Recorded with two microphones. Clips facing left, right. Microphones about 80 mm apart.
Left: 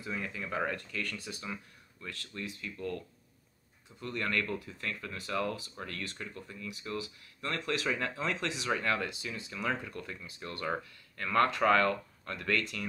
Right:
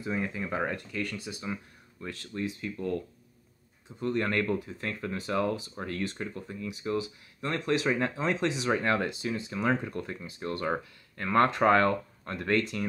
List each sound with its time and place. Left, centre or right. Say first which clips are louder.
0.0 s speech: right 6 dB; right
4.0 s speech: right 6 dB; right